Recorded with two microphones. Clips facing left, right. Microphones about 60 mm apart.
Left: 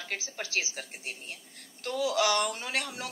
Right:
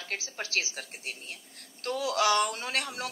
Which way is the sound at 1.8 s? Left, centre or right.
Right.